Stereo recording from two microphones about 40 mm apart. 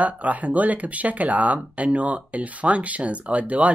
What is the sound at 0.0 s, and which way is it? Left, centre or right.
Speech, right.